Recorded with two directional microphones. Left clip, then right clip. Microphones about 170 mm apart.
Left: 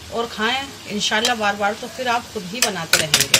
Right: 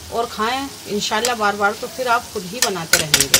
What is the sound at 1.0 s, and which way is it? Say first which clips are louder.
Speech: even; 55° right (ahead or behind).